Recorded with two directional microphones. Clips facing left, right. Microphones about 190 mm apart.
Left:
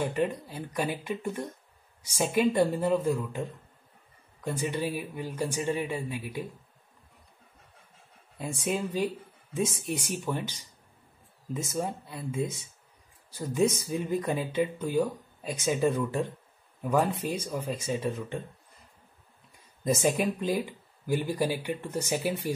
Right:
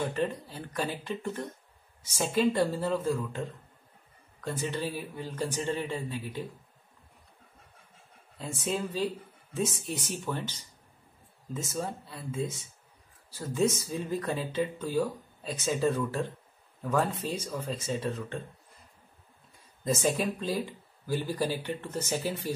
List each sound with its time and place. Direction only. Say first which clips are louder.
0.0 s speech: left 2 dB; 15° left (ahead or behind)
8.4 s speech: left 2 dB; 15° left (ahead or behind)
19.8 s speech: left 2 dB; 15° left (ahead or behind)